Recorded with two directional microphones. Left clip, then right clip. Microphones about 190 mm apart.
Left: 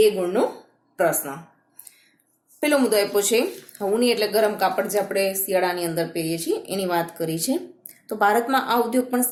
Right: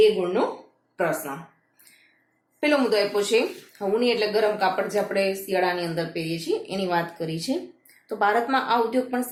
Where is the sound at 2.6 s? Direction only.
35° left (ahead or behind).